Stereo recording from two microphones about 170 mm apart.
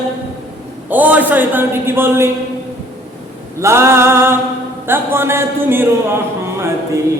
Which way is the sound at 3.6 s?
15° right (ahead or behind).